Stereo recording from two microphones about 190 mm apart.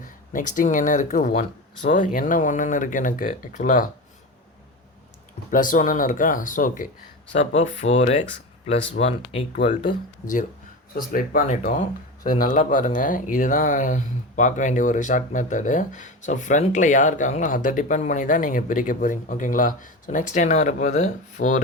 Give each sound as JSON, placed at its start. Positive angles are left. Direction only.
{"t": 0.0, "sound": "speech", "side_deg": 45}
{"t": 5.5, "sound": "speech", "side_deg": 45}
{"t": 9.8, "sound": "speech", "side_deg": 45}